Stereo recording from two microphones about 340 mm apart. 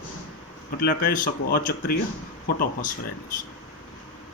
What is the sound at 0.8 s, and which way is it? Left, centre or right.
Speech, left.